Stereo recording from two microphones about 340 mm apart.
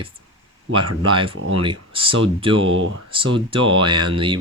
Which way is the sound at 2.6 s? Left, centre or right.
Right.